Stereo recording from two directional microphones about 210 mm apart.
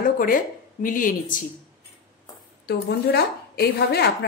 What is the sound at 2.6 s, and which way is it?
A woman's voice, 50° left (ahead or behind).